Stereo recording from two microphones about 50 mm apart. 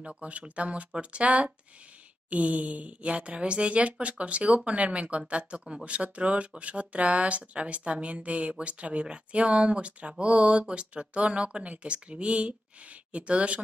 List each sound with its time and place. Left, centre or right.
0.0 s speech: right